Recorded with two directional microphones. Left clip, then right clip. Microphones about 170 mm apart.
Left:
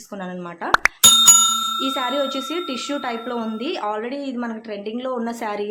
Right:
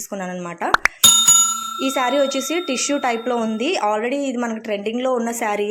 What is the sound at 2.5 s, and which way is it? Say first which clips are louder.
Speech: right 4 dB; 15° right (ahead or behind).